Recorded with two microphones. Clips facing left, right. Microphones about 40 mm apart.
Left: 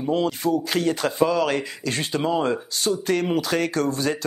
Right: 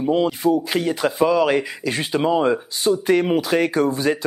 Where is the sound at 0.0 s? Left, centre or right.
Centre.